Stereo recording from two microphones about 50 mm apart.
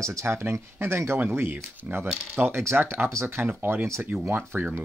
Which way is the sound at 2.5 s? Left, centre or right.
Right.